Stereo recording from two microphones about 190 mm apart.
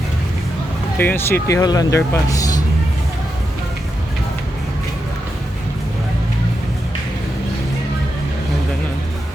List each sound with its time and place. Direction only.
0.9 s speech: 10° left (ahead or behind)